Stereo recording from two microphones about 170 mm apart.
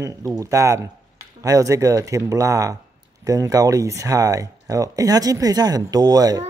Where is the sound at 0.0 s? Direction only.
20° right (ahead or behind).